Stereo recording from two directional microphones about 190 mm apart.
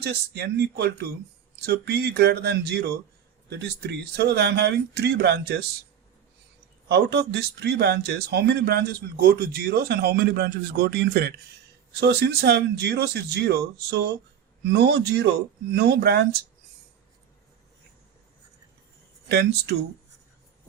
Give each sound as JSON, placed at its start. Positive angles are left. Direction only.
{"t": 0.0, "sound": "speech", "side_deg": -60}
{"t": 6.8, "sound": "speech", "side_deg": -60}
{"t": 19.3, "sound": "speech", "side_deg": -60}